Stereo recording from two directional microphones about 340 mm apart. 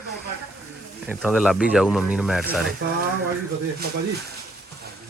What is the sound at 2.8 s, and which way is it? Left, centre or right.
Speech, right.